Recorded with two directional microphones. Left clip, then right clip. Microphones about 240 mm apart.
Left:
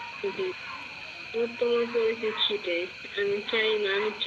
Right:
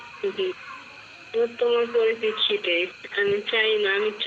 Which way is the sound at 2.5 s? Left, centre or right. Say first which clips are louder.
Right 6 dB; right.